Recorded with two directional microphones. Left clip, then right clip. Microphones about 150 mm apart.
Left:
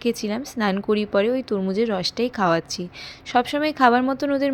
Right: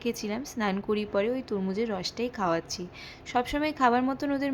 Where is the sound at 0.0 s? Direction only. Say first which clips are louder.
Left 7 dB; 30° left (ahead or behind).